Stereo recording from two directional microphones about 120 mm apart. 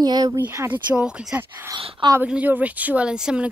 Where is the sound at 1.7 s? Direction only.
45° right (ahead or behind).